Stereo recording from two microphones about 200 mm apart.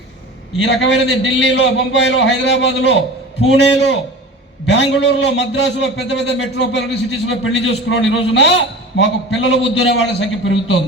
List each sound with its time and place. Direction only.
0.6 s a man's voice: 65° left (ahead or behind)
7.3 s a man's voice: 75° left (ahead or behind)